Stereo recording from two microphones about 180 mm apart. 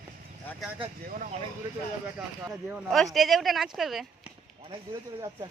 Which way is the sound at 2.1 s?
5° right (ahead or behind).